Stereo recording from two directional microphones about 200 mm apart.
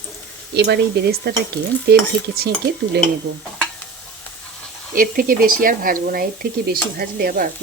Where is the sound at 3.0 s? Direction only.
55° right (ahead or behind).